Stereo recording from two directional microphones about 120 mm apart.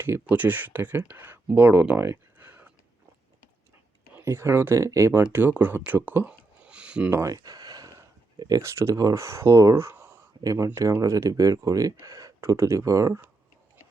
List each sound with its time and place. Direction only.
0.0 s speech: 15° right (ahead or behind)
4.2 s speech: 20° right (ahead or behind)
7.1 s speech: 25° right (ahead or behind)